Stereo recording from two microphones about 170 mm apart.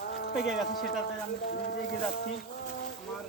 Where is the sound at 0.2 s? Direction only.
65° left (ahead or behind).